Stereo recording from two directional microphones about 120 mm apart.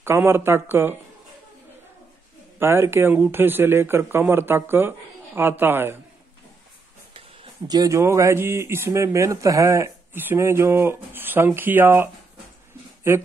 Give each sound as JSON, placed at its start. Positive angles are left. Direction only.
{"t": 0.0, "sound": "speech", "side_deg": -20}
{"t": 2.6, "sound": "speech", "side_deg": -20}
{"t": 7.6, "sound": "speech", "side_deg": -30}